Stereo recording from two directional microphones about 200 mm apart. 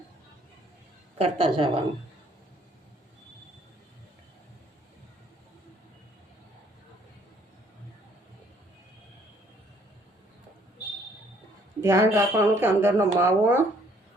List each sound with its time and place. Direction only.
1.2 s a woman's voice: 25° right (ahead or behind)
11.8 s speech: 15° right (ahead or behind)